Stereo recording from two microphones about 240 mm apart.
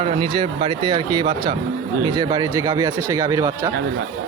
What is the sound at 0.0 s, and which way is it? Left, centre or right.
Speech, right.